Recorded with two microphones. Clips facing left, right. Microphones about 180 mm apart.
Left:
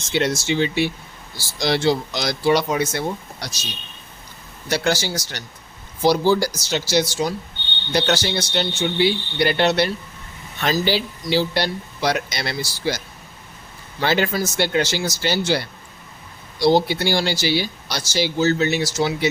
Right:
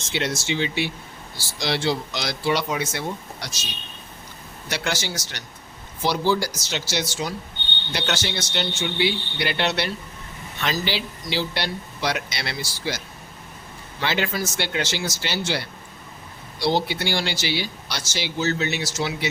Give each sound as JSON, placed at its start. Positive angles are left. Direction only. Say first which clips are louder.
{"t": 0.1, "sound": "a man's voice", "louder": "left 5 dB", "side_deg": 45}
{"t": 4.7, "sound": "a man's voice", "louder": "left 6 dB", "side_deg": 35}
{"t": 14.0, "sound": "speech", "louder": "left 5 dB", "side_deg": 45}